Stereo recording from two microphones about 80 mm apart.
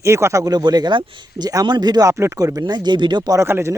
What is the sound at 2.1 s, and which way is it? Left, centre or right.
Speech, right.